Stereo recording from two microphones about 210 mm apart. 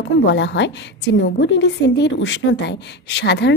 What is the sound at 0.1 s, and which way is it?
A woman's voice, 60° left (ahead or behind).